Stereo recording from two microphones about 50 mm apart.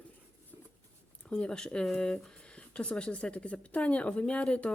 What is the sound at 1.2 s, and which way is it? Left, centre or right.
Speech, centre.